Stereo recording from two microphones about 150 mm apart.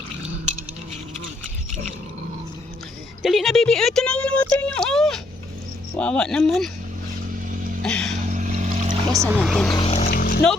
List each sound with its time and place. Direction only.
3.2 s a sound: centre (ahead or behind)
6.0 s speech: 5° left (ahead or behind)
7.5 s a sound: 65° right (ahead or behind)
7.8 s music: 5° left (ahead or behind)
8.3 s a sound: 55° right (ahead or behind)
9.1 s speech: 15° right (ahead or behind)
9.4 s speech: 5° left (ahead or behind)
9.7 s speech: 40° left (ahead or behind)
10.0 s splash: 80° left